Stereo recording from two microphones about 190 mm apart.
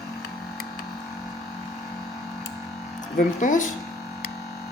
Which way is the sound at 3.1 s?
40° left (ahead or behind).